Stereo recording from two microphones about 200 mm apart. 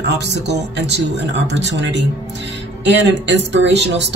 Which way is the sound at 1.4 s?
60° right (ahead or behind).